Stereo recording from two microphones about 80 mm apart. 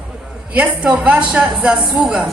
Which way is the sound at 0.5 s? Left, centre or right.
Centre.